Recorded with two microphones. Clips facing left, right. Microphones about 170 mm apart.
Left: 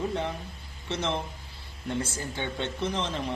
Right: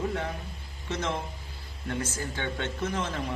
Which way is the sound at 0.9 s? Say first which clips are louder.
Left 1 dB; 15° left (ahead or behind).